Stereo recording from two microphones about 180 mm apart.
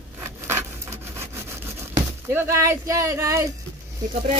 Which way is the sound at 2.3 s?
15° right (ahead or behind).